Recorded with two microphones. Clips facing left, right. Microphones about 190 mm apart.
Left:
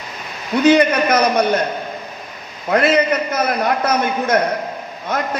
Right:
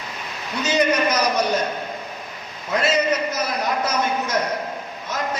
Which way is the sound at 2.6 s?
60° left (ahead or behind).